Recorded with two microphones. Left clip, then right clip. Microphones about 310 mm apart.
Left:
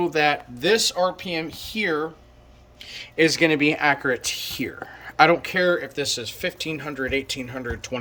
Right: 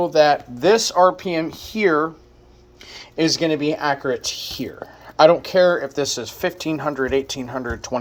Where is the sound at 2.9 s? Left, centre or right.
Centre.